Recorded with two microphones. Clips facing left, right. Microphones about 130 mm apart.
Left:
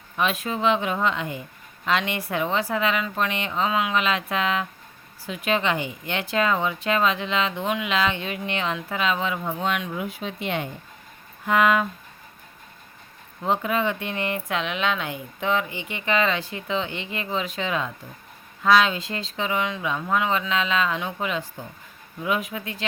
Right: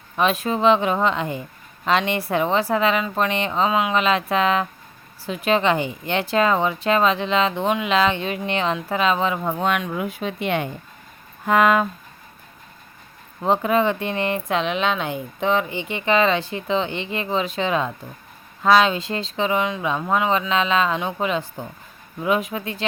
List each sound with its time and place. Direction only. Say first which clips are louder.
0.2 s a woman's voice: right 5 dB; 35° right (ahead or behind)
9.4 s speech: right 4 dB; 55° right (ahead or behind)
11.4 s speech: right 3 dB; 45° right (ahead or behind)
13.4 s speech: right 5 dB; 35° right (ahead or behind)